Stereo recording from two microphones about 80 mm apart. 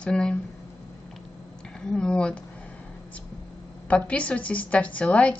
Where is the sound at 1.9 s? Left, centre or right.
Centre.